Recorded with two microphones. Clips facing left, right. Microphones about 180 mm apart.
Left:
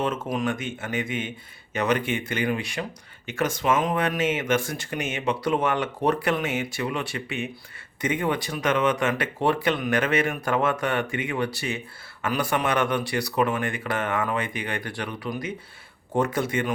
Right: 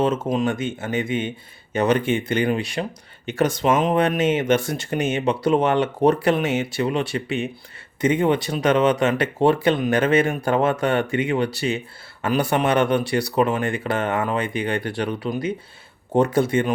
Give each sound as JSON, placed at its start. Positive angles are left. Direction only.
{"t": 0.0, "sound": "speech", "side_deg": -25}